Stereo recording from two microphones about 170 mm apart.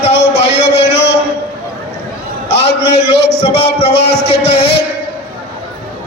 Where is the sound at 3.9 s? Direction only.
75° left (ahead or behind).